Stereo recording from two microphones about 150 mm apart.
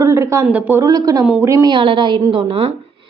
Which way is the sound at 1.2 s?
5° right (ahead or behind).